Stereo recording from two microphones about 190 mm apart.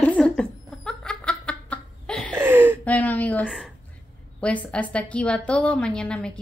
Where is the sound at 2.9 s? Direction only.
10° left (ahead or behind).